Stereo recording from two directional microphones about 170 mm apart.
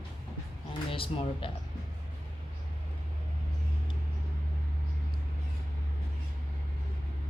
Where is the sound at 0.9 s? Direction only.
30° left (ahead or behind).